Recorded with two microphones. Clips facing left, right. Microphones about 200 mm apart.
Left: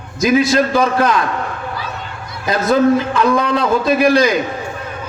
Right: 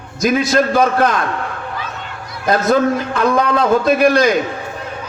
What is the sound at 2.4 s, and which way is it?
A man's voice, 55° right (ahead or behind).